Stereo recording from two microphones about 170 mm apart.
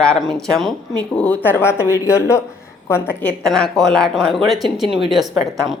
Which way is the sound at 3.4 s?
Centre (ahead or behind).